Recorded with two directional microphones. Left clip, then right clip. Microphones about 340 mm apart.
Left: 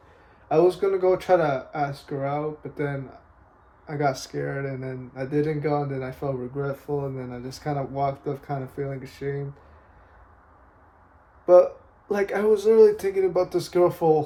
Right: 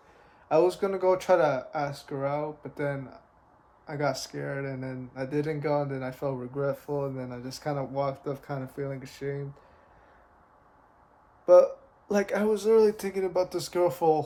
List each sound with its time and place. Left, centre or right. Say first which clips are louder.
0.4 s speech: left 4 dB; centre
11.4 s speech: left 2 dB; centre